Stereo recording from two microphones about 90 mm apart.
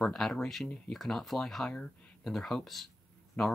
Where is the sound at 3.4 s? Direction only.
15° left (ahead or behind).